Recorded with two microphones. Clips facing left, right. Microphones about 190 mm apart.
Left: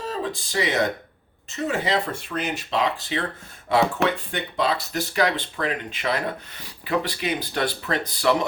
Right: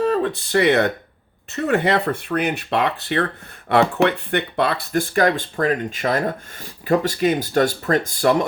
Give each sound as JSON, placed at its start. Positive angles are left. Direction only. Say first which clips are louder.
{"t": 0.0, "sound": "speech", "louder": "right 9 dB", "side_deg": -60}